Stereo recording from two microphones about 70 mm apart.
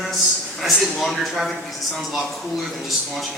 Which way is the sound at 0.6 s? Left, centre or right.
Centre.